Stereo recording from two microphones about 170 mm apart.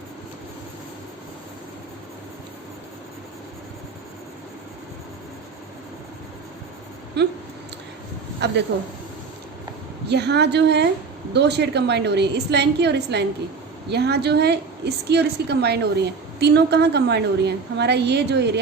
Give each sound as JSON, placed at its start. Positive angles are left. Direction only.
{"t": 7.2, "sound": "a woman's voice", "side_deg": -80}
{"t": 10.1, "sound": "a woman's voice", "side_deg": -80}